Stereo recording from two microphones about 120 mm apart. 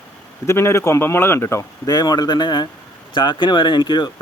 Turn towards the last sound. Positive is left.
turn(degrees=40)  # may be behind; listen again after turning